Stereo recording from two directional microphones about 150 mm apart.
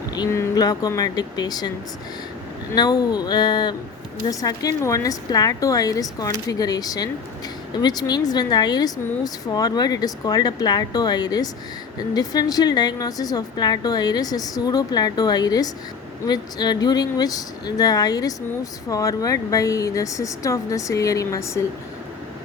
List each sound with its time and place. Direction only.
0.1 s speech: 25° left (ahead or behind)
2.7 s speech: 25° left (ahead or behind)